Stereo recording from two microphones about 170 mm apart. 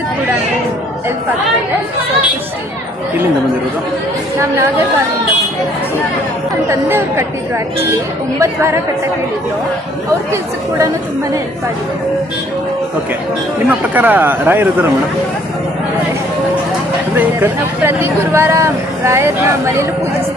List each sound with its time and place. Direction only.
6.7 s speech: 15° right (ahead or behind)
8.4 s speech: 15° right (ahead or behind)
13.7 s speech: 10° right (ahead or behind)
17.2 s speech: 15° right (ahead or behind)